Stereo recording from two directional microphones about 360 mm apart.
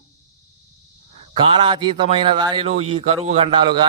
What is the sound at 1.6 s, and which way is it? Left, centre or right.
A man's voice, centre.